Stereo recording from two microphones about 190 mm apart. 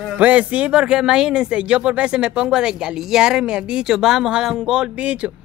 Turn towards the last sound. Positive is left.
turn(degrees=-5)  # may be behind; listen again after turning